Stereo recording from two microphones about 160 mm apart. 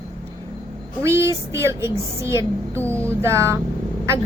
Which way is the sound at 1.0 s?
15° right (ahead or behind).